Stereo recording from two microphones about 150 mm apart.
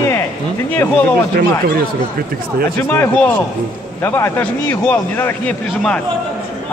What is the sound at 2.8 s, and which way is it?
Speech, 15° left (ahead or behind).